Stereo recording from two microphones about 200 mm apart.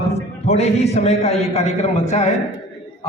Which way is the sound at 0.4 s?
30° left (ahead or behind).